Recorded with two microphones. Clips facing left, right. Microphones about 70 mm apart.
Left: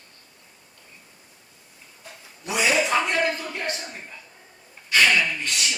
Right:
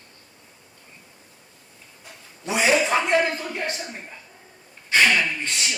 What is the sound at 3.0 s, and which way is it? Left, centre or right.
Speech, right.